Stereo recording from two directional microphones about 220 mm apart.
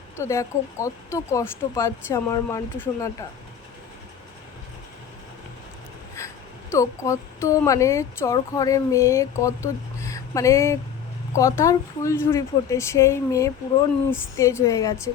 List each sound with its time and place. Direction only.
0.2 s speech: 15° left (ahead or behind)
6.1 s speech: 15° left (ahead or behind)